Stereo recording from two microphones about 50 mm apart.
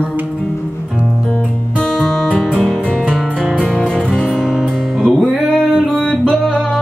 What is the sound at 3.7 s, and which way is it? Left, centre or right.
Music, centre.